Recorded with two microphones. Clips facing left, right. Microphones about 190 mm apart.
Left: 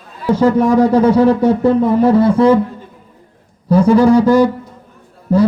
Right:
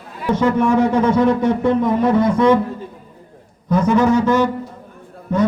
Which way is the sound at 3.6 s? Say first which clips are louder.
Left 5 dB; 35° left (ahead or behind).